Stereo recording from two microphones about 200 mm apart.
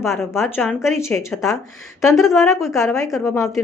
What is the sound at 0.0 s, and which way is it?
Speech, 10° left (ahead or behind).